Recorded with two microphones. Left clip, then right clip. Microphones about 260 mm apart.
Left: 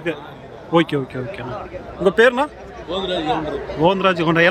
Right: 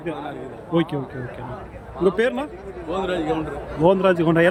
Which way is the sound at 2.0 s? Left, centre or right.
Centre.